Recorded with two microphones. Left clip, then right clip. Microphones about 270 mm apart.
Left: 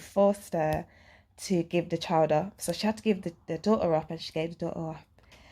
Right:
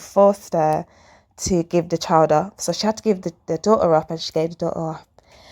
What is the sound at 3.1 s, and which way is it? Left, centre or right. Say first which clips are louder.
Speech: right 9 dB; right.